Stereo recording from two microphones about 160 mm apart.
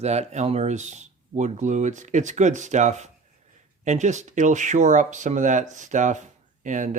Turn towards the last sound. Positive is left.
turn(degrees=-50)  # may be behind; listen again after turning